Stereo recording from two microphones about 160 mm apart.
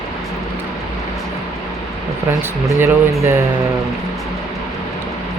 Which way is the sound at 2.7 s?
20° right (ahead or behind).